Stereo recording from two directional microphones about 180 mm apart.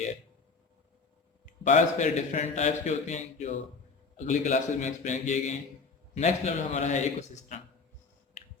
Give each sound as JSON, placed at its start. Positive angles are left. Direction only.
{"t": 1.6, "sound": "speech", "side_deg": 40}